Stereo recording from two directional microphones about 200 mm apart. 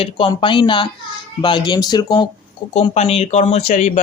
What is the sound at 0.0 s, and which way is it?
Speech, 25° left (ahead or behind).